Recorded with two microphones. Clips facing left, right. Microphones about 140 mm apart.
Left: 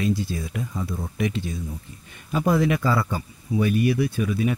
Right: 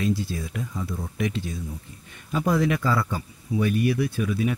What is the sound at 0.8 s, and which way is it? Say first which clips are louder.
Speech: left 2 dB; 15° left (ahead or behind).